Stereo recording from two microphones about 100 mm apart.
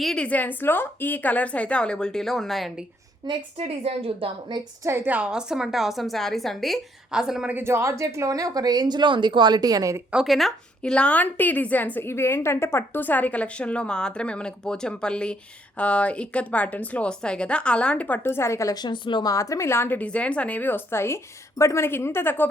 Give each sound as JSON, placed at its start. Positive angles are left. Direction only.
{"t": 0.0, "sound": "a woman's voice", "side_deg": 5}
{"t": 0.3, "sound": "a woman's voice", "side_deg": 15}
{"t": 3.2, "sound": "a woman's voice", "side_deg": -45}
{"t": 3.7, "sound": "a woman's voice", "side_deg": -80}
{"t": 4.8, "sound": "a woman's voice", "side_deg": -25}
{"t": 5.1, "sound": "a woman's voice", "side_deg": -10}
{"t": 7.5, "sound": "speech", "side_deg": -25}
{"t": 10.1, "sound": "a woman's voice", "side_deg": -5}
{"t": 18.8, "sound": "speech", "side_deg": 50}
{"t": 19.3, "sound": "a woman's voice", "side_deg": 35}